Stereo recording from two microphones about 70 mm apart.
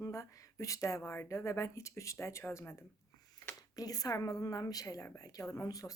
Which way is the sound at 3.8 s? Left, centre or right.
Left.